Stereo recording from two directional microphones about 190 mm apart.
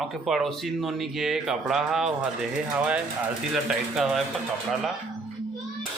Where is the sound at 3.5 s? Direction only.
Centre (ahead or behind).